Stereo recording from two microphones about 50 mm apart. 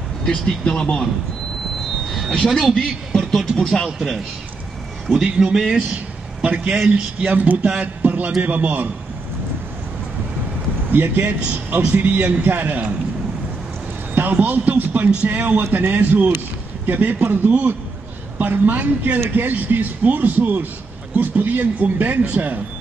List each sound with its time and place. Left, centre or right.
0.2 s speech: centre
2.0 s a sound: centre
2.7 s a man's voice: centre
5.5 s a man's voice: centre
7.2 s a man's voice: right
10.9 s a man's voice: right
14.1 s a man's voice: right